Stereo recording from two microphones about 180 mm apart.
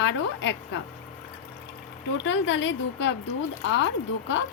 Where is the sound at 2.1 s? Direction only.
90° left.